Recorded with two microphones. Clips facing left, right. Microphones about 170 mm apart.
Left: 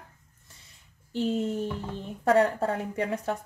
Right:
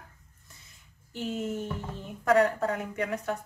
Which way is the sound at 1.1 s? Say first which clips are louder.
Left 5 dB; 30° left (ahead or behind).